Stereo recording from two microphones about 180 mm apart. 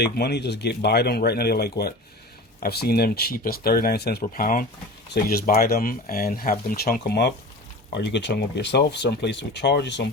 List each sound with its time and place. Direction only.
0.0 s speech: 65° left (ahead or behind)
5.0 s speech: 60° left (ahead or behind)
7.9 s speech: 80° left